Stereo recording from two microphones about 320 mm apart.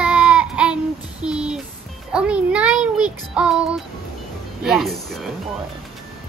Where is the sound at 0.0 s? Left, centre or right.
Centre.